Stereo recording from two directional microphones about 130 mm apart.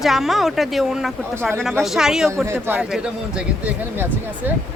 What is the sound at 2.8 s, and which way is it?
Speech, 5° right (ahead or behind).